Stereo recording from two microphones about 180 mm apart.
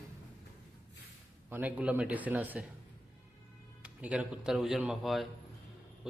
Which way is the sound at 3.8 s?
5° right (ahead or behind).